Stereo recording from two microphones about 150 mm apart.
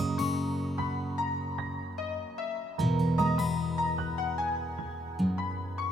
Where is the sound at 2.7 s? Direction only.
Centre (ahead or behind).